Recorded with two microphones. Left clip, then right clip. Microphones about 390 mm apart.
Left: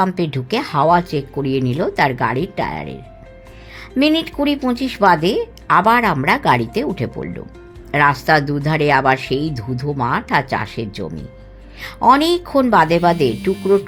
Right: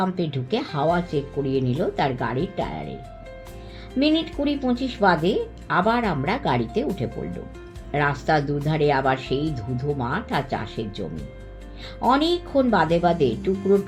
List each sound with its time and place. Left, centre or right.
0.0 s speech: left
3.9 s speech: left
12.0 s speech: left